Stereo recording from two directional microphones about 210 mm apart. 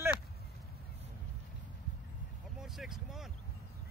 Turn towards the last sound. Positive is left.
turn(degrees=0)  # may be behind; listen again after turning